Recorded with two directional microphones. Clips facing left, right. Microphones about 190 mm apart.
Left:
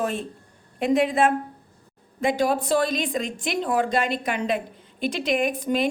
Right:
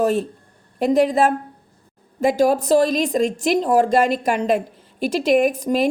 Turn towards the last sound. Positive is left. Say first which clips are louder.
# right 5 dB
turn(degrees=-40)  # may be behind; listen again after turning